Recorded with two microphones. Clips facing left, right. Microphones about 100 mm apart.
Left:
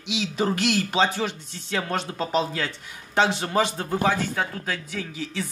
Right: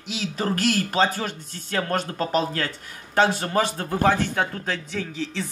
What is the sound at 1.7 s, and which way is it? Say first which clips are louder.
Speech: right 2 dB; centre (ahead or behind).